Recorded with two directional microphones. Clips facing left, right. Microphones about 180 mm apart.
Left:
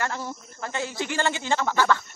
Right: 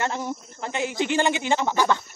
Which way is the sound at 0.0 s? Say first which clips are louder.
Right 3 dB; 20° right (ahead or behind).